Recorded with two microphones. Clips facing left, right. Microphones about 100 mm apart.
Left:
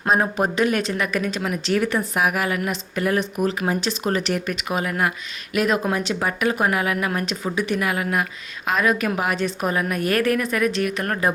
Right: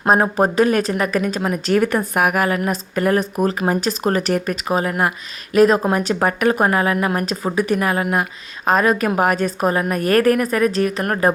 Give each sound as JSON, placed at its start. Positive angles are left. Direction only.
{"t": 0.2, "sound": "speech", "side_deg": -40}